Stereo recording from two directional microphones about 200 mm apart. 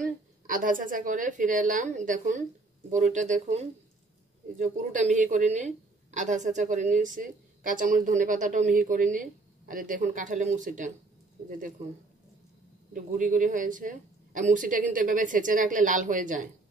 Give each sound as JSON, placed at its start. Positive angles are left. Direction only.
{"t": 0.0, "sound": "a woman's voice", "side_deg": -40}
{"t": 12.9, "sound": "a woman's voice", "side_deg": -40}